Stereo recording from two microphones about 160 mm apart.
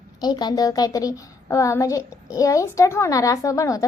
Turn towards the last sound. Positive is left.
turn(degrees=20)  # may be behind; listen again after turning